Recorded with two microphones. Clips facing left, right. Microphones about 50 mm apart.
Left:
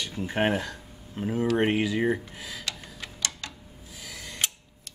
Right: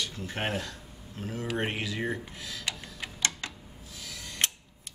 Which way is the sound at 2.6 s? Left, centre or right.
Centre.